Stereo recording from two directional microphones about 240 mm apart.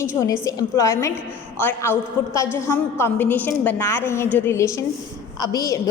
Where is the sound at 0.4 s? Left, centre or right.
Centre.